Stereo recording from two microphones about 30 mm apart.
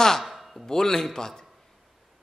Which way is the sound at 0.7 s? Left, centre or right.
Centre.